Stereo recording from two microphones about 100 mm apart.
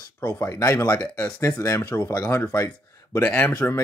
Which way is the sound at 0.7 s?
35° left (ahead or behind).